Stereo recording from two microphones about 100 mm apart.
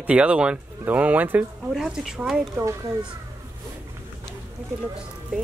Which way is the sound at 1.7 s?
5° right (ahead or behind).